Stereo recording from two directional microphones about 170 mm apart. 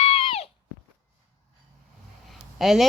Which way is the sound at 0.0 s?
30° left (ahead or behind).